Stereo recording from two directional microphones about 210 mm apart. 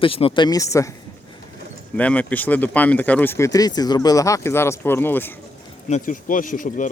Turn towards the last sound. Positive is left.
turn(degrees=40)  # may be behind; listen again after turning